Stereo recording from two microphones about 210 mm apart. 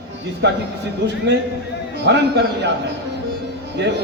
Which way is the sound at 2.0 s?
55° right (ahead or behind).